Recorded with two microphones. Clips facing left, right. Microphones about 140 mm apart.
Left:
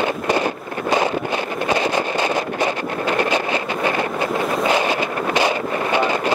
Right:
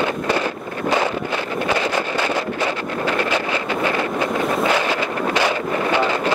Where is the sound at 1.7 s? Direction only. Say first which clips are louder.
Left 2 dB; 15° left (ahead or behind).